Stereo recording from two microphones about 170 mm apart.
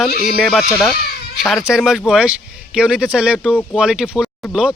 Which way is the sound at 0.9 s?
65° left (ahead or behind).